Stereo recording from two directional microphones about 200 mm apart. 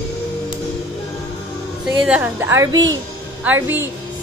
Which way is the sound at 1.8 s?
5° right (ahead or behind).